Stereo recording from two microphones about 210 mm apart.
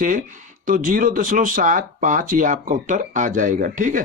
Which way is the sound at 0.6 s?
40° right (ahead or behind).